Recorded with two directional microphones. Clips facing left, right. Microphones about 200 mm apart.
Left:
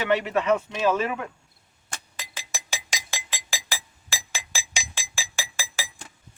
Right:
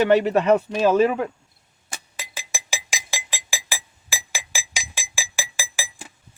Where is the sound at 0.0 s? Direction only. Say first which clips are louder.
Right 7 dB; 40° right (ahead or behind).